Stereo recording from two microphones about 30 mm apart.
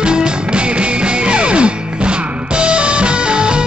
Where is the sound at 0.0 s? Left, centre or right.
Right.